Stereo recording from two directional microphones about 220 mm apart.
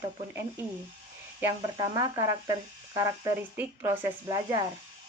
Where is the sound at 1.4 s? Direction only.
15° right (ahead or behind).